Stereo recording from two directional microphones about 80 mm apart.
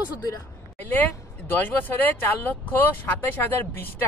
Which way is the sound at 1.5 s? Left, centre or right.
Left.